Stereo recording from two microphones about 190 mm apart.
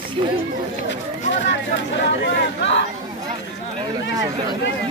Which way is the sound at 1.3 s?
70° left (ahead or behind).